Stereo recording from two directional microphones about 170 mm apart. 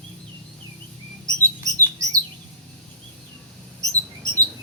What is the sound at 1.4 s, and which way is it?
Bird, 20° right (ahead or behind).